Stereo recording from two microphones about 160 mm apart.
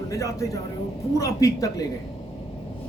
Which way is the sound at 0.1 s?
20° left (ahead or behind).